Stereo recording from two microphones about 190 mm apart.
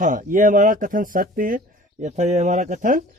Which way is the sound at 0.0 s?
45° right (ahead or behind).